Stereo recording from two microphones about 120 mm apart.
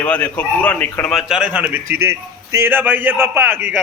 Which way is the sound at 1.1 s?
5° right (ahead or behind).